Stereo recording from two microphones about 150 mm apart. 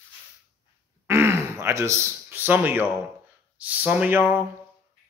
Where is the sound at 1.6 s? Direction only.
15° right (ahead or behind).